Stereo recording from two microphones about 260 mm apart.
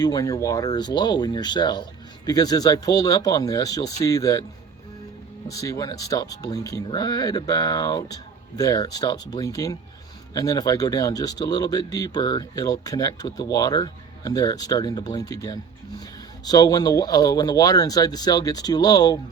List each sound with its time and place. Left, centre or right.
0.0 s speech: centre
5.5 s speech: centre